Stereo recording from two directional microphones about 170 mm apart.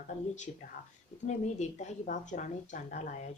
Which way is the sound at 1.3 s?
45° left (ahead or behind).